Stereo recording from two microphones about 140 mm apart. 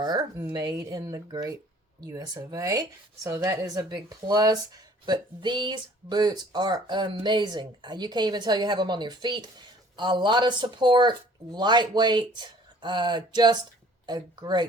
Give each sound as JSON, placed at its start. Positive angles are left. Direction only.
{"t": 0.0, "sound": "speech", "side_deg": -30}